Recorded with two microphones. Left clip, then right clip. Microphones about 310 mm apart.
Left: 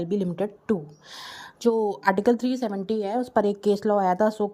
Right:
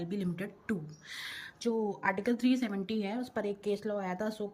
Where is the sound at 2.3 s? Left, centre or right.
Centre.